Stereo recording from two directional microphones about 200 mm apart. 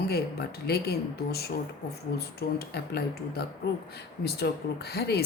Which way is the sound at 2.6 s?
55° left (ahead or behind).